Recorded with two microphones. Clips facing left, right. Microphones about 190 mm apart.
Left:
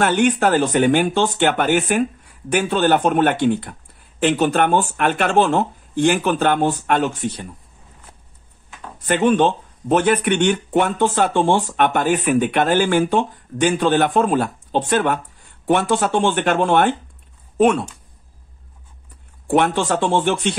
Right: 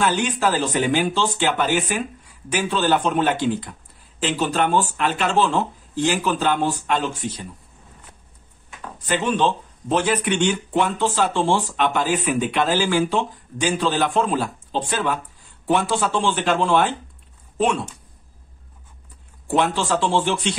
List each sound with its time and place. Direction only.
0.0 s speech: 60° left (ahead or behind)
9.0 s speech: 60° left (ahead or behind)
19.5 s speech: 55° left (ahead or behind)